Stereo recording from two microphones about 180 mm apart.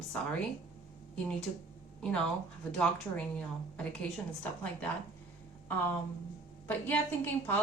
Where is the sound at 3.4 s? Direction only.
5° left (ahead or behind).